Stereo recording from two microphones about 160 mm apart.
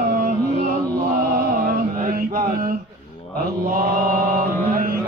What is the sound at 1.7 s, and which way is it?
Mantra, 60° right (ahead or behind).